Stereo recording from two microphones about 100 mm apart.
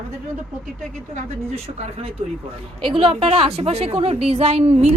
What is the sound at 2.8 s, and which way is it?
A woman's voice, 65° right (ahead or behind).